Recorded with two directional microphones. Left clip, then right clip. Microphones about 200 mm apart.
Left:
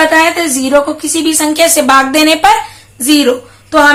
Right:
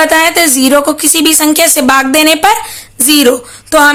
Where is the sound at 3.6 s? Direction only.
50° right (ahead or behind).